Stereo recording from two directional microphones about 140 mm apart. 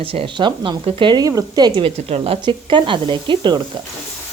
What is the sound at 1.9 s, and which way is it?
A woman's voice, 45° right (ahead or behind).